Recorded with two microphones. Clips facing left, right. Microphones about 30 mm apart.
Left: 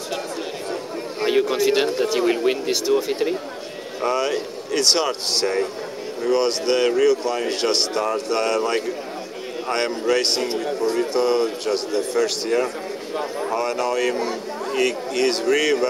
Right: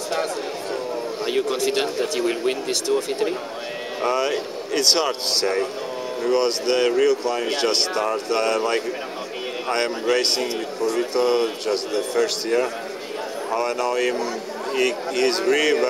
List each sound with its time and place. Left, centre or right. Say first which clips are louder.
1.2 s a man's voice: left 4 dB; centre